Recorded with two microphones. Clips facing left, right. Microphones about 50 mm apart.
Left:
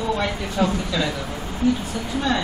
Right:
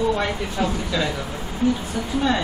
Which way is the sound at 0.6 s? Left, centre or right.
Centre.